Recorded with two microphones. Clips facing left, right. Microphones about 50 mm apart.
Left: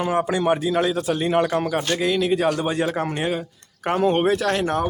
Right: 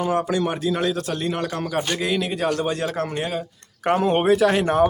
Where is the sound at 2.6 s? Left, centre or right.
Centre.